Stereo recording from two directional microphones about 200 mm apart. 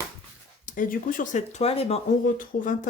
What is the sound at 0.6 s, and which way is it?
Speech, 40° left (ahead or behind).